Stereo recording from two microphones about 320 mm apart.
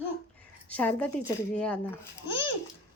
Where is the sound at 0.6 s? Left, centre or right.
Centre.